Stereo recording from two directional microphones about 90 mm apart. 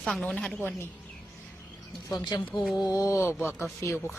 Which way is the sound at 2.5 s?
5° right (ahead or behind).